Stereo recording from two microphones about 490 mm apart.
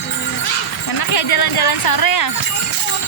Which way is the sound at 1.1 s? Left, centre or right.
Left.